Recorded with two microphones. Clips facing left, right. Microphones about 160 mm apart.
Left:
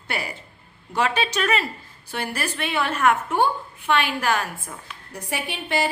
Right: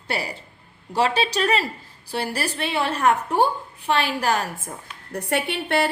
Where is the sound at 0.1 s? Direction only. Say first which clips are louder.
Right 2 dB; 35° right (ahead or behind).